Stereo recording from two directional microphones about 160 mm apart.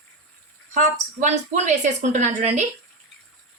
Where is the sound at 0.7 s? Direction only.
50° right (ahead or behind).